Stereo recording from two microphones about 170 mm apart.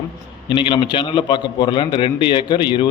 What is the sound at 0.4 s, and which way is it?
A man's voice, 30° left (ahead or behind).